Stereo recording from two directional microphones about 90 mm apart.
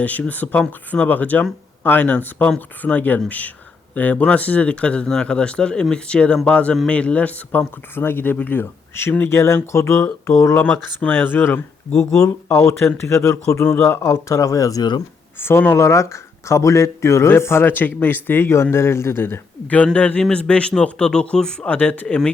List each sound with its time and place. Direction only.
0.0 s speech: 15° left (ahead or behind)
10.5 s speech: 20° left (ahead or behind)
11.9 s speech: 35° left (ahead or behind)
13.7 s speech: 25° left (ahead or behind); by 15.0 s 50° left (ahead or behind)
15.4 s speech: 25° left (ahead or behind); by 22.3 s 10° left (ahead or behind)